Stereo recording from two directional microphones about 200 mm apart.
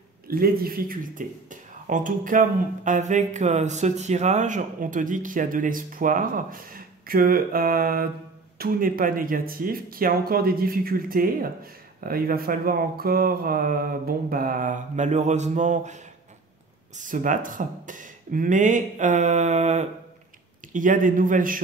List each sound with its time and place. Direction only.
0.3 s speech: 50° right (ahead or behind)